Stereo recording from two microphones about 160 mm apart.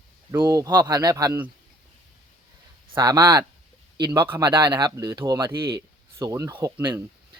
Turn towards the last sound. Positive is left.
turn(degrees=-25)  # may be behind; listen again after turning